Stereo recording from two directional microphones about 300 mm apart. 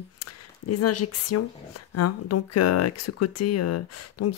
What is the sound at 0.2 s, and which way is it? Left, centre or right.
Speech, left.